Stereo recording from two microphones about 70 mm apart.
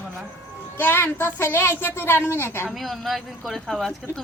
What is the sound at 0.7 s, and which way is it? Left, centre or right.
A woman's voice, left.